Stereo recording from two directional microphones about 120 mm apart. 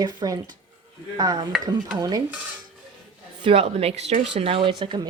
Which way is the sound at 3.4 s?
55° right (ahead or behind).